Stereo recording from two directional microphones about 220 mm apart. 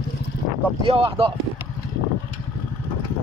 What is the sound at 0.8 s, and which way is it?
Speech, 25° right (ahead or behind).